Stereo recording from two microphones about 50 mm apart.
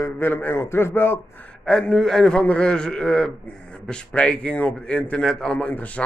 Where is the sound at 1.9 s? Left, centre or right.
Centre.